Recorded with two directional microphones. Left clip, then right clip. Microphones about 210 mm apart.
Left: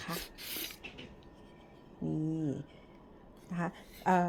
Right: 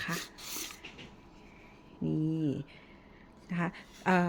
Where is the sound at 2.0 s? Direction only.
25° right (ahead or behind).